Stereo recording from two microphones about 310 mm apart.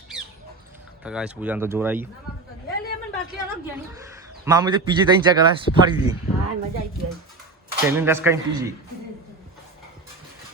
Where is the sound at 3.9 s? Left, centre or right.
Centre.